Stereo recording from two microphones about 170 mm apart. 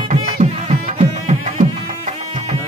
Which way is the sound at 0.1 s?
40° right (ahead or behind).